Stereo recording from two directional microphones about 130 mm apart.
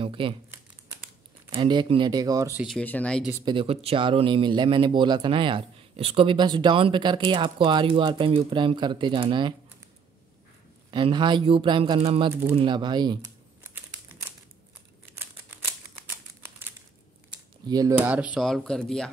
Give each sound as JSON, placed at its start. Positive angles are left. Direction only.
{"t": 0.0, "sound": "speech", "side_deg": -40}
{"t": 1.5, "sound": "speech", "side_deg": -40}
{"t": 2.8, "sound": "speech", "side_deg": 10}
{"t": 3.4, "sound": "speech", "side_deg": -45}
{"t": 10.9, "sound": "speech", "side_deg": -40}
{"t": 15.1, "sound": "typewriter", "side_deg": -20}
{"t": 17.6, "sound": "speech", "side_deg": -30}
{"t": 17.9, "sound": "speech", "side_deg": -10}
{"t": 18.4, "sound": "speech", "side_deg": 5}